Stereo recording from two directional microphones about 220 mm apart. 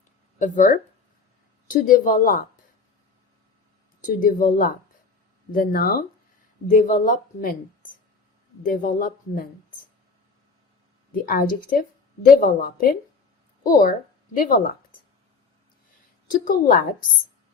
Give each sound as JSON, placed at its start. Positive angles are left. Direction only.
{"t": 0.3, "sound": "speech", "side_deg": 35}
{"t": 4.0, "sound": "speech", "side_deg": 35}
{"t": 11.1, "sound": "speech", "side_deg": 40}
{"t": 16.3, "sound": "speech", "side_deg": 35}